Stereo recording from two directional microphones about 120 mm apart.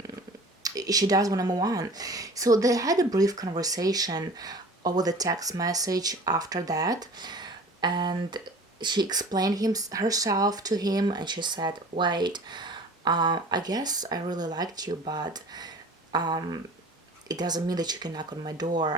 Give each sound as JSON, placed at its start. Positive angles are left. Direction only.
{"t": 0.6, "sound": "speech", "side_deg": -30}